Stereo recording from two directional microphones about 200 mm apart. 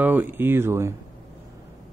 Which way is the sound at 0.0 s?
10° right (ahead or behind).